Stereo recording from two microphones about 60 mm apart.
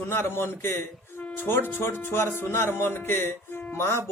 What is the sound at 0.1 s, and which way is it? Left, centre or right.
A man's voice, left.